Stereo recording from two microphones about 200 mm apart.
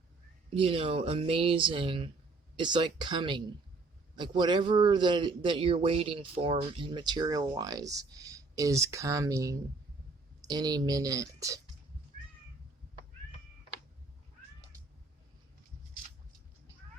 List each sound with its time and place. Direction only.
0.5 s a man's voice: 25° right (ahead or behind)